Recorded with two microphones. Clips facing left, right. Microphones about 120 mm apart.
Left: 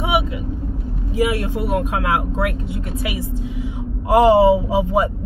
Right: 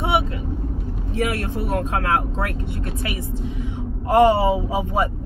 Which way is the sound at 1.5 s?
15° left (ahead or behind).